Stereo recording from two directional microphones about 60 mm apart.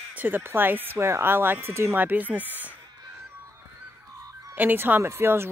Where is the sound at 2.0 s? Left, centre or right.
Right.